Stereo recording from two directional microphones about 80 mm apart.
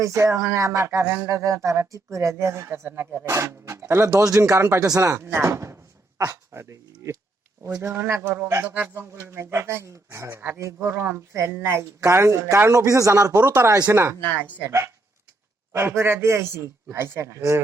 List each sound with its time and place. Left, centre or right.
0.0 s speech: right
4.1 s speech: right
8.6 s a man's voice: right
13.4 s speech: right